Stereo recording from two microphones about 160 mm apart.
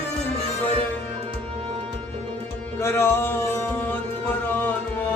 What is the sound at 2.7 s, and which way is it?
Music, 15° left (ahead or behind).